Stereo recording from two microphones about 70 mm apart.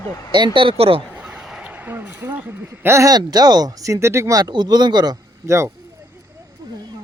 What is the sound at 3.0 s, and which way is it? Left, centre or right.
Speech, right.